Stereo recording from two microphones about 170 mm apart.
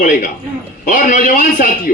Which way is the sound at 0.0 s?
55° left (ahead or behind).